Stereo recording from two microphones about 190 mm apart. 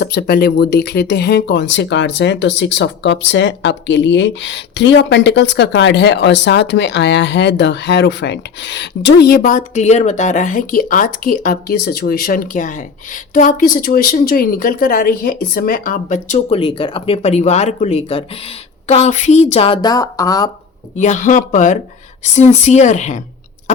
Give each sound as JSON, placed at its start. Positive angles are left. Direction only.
{"t": 0.0, "sound": "a woman's voice", "side_deg": 55}
{"t": 21.0, "sound": "a woman's voice", "side_deg": 40}